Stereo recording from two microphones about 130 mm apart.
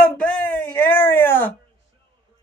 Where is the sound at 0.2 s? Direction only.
15° left (ahead or behind).